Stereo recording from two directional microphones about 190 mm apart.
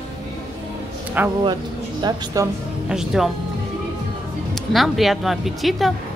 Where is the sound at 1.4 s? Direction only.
20° right (ahead or behind).